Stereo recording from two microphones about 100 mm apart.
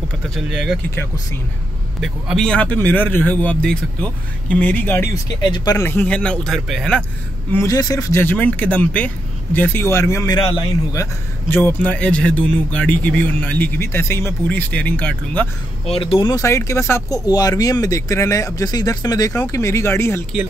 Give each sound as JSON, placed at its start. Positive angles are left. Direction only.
{"t": 0.4, "sound": "speech", "side_deg": -5}
{"t": 0.9, "sound": "speech", "side_deg": 25}
{"t": 2.0, "sound": "speech", "side_deg": 5}
{"t": 5.1, "sound": "speech", "side_deg": 40}
{"t": 5.8, "sound": "speech", "side_deg": 20}
{"t": 6.1, "sound": "speech", "side_deg": 10}
{"t": 7.5, "sound": "speech", "side_deg": 35}
{"t": 8.2, "sound": "speech", "side_deg": 20}
{"t": 11.5, "sound": "speech", "side_deg": 20}
{"t": 15.9, "sound": "speech", "side_deg": 70}
{"t": 16.2, "sound": "speech", "side_deg": 45}
{"t": 16.4, "sound": "speech", "side_deg": 30}
{"t": 17.1, "sound": "speech", "side_deg": 40}